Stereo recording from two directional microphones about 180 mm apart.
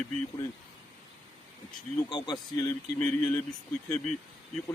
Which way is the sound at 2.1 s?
20° left (ahead or behind).